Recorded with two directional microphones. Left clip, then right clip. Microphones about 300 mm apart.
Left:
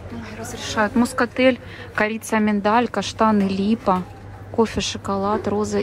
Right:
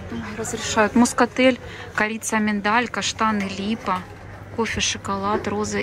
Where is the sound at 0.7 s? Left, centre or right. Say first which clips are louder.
Right 2 dB; centre.